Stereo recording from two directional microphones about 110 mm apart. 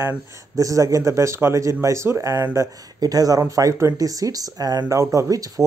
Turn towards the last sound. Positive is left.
turn(degrees=-30)  # may be behind; listen again after turning